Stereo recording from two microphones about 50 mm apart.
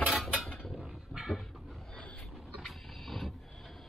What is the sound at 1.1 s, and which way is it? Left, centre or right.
Dog, centre.